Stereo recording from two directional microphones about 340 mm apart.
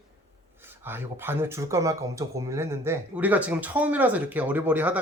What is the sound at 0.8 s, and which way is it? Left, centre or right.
Speech, centre.